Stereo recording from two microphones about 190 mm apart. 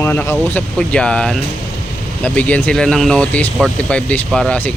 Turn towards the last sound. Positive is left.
turn(degrees=5)  # may be behind; listen again after turning